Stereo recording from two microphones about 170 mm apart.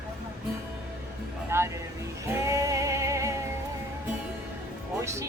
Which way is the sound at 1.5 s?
15° right (ahead or behind).